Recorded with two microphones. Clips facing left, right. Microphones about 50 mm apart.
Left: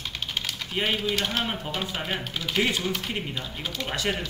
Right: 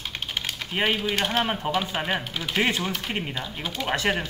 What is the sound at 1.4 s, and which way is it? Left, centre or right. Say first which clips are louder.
Speech: right 5 dB; right.